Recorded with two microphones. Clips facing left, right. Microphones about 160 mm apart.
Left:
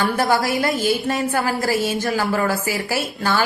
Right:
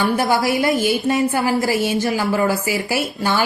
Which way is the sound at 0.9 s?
20° right (ahead or behind).